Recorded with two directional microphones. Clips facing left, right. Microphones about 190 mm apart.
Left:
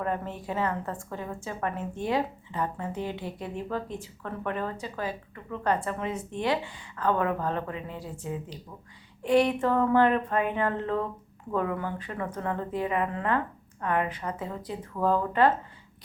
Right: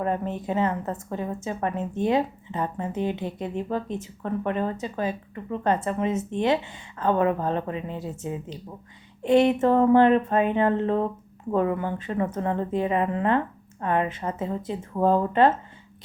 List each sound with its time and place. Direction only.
0.0 s a woman's voice: 20° right (ahead or behind)